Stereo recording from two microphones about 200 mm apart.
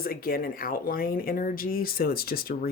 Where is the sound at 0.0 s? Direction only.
45° left (ahead or behind).